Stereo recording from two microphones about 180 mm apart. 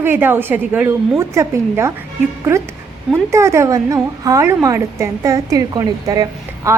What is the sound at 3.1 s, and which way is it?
A woman's voice, 15° right (ahead or behind).